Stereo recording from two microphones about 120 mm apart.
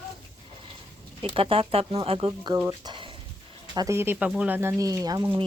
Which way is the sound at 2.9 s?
45° right (ahead or behind).